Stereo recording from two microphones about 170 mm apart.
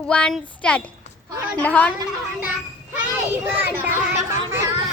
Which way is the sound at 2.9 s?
10° right (ahead or behind).